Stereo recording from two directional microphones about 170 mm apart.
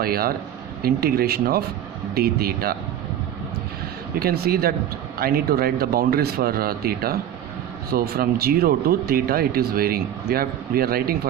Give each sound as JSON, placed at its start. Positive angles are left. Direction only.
{"t": 0.0, "sound": "speech", "side_deg": -60}
{"t": 4.2, "sound": "speech", "side_deg": -65}